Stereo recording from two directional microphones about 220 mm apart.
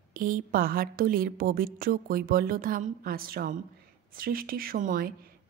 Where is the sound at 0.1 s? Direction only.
40° right (ahead or behind).